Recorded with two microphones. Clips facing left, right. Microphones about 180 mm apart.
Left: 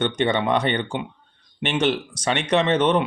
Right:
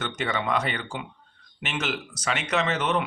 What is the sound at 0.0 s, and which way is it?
Speech, 30° left (ahead or behind).